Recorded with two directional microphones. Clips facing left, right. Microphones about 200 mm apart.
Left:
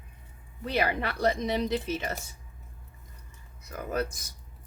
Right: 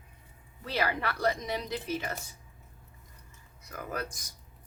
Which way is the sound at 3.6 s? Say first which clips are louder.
Left 6 dB; 25° left (ahead or behind).